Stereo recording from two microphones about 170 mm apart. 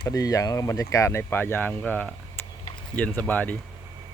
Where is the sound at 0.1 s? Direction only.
20° left (ahead or behind).